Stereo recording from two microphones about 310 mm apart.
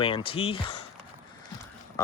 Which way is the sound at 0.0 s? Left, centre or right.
Centre.